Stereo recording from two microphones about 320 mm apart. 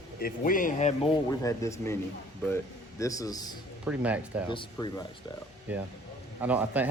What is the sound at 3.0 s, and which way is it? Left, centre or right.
Speech, centre.